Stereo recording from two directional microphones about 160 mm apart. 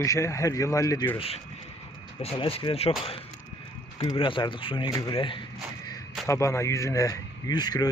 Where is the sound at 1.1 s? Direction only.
35° left (ahead or behind).